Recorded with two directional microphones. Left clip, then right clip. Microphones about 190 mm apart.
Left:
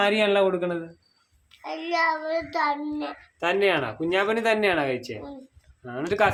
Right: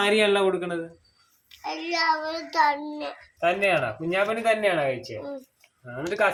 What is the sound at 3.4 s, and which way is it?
Speech, 35° left (ahead or behind).